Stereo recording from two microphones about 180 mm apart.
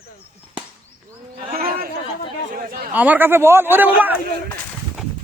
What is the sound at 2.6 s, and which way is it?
Chatter, 55° right (ahead or behind).